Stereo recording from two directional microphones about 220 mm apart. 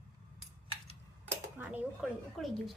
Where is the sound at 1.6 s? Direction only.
5° right (ahead or behind).